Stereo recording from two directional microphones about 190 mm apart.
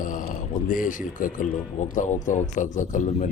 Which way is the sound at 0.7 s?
45° left (ahead or behind).